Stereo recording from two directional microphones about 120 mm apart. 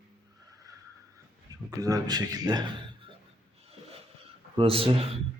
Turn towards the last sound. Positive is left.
turn(degrees=-50)  # may be behind; listen again after turning